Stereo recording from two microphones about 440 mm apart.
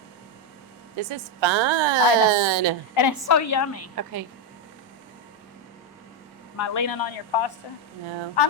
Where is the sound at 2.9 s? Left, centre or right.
Left.